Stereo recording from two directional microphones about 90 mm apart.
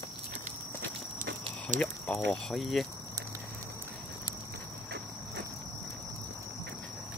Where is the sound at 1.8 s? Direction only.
15° left (ahead or behind).